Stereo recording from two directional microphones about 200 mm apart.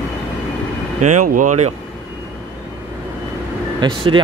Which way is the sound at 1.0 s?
40° right (ahead or behind).